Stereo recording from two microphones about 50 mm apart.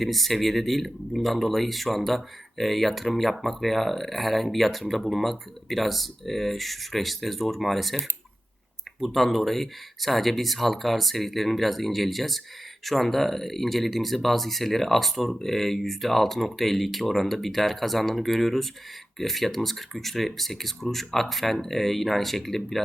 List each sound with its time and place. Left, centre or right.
0.0 s speech: centre
9.0 s speech: centre